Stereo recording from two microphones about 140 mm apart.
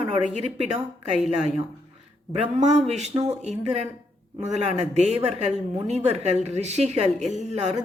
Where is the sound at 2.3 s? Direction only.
55° right (ahead or behind).